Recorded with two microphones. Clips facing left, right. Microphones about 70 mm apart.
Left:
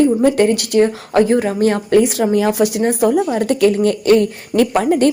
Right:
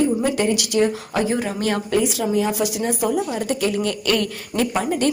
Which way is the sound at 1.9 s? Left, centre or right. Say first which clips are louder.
Left 7 dB; left.